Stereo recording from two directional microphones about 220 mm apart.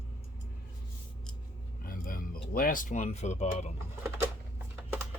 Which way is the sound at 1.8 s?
40° left (ahead or behind).